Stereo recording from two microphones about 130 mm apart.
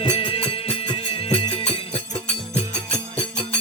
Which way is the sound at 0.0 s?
40° left (ahead or behind).